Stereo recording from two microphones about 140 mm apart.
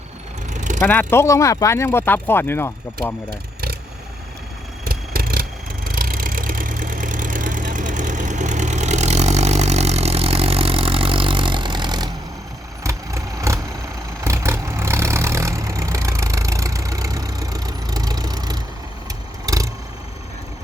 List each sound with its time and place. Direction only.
0.5 s vehicle: 60° right (ahead or behind)
0.8 s speech: 15° left (ahead or behind)
4.9 s vehicle: 90° right; by 19.7 s 25° right (ahead or behind)